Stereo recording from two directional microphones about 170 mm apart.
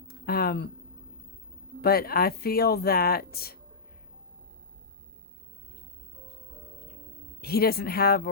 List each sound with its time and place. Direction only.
0.1 s a sound: 65° left (ahead or behind)
1.8 s speech: 60° left (ahead or behind)
7.4 s speech: 65° left (ahead or behind)